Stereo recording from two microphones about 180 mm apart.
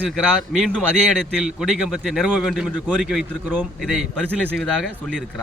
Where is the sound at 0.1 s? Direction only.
Centre (ahead or behind).